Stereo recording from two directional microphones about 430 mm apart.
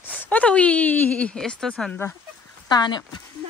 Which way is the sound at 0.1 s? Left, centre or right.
Centre.